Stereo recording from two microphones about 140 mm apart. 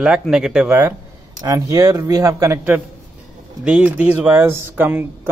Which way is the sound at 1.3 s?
25° right (ahead or behind).